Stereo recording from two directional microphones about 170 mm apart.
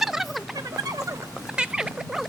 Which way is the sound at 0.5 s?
20° right (ahead or behind).